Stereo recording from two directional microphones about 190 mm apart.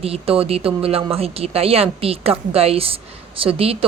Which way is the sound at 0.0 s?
30° right (ahead or behind).